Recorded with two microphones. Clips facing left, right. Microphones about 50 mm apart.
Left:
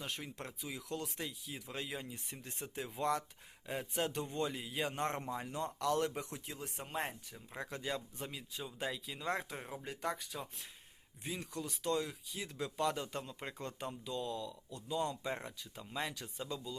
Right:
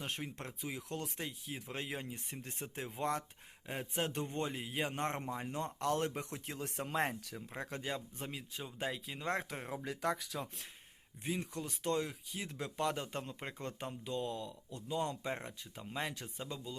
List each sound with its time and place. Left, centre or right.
0.0 s speech: right
7.5 s speech: right
9.8 s speech: right
11.2 s speech: right